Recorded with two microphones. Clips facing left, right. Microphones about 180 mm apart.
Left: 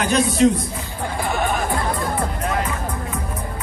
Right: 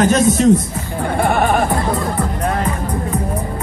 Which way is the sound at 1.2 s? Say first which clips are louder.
Right 7 dB; 60° right (ahead or behind).